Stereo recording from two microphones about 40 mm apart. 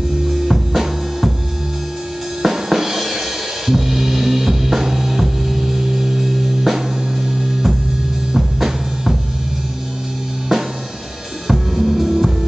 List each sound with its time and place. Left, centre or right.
0.5 s music: centre
2.4 s music: centre
8.3 s drum: centre
10.5 s music: centre